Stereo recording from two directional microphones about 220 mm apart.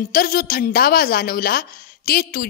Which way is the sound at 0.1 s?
40° left (ahead or behind).